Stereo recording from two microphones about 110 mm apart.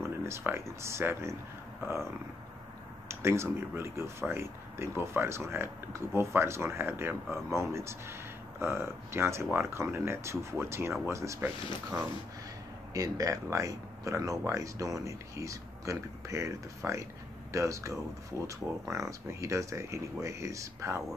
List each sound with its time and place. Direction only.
0.0 s speech: 20° right (ahead or behind)
3.1 s speech: 25° right (ahead or behind)
12.9 s speech: 30° right (ahead or behind)